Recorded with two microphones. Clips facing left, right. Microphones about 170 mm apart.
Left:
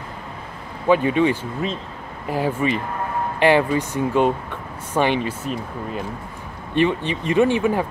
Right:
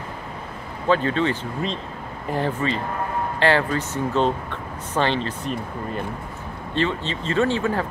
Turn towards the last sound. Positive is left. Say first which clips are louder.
# left 4 dB
turn(degrees=15)  # may be behind; listen again after turning